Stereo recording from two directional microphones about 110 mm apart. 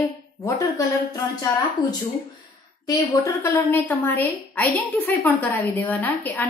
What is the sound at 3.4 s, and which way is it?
A woman's voice, 20° left (ahead or behind).